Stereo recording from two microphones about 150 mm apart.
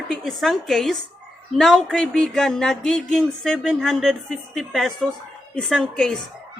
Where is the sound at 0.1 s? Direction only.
Centre (ahead or behind).